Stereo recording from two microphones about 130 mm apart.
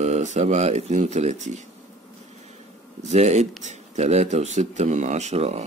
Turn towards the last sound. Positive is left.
turn(degrees=-55)  # may be behind; listen again after turning